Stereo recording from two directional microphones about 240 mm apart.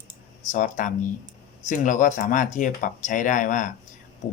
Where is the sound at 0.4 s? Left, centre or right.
Left.